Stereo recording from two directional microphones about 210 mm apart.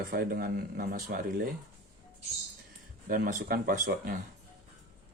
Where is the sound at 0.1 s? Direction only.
45° right (ahead or behind).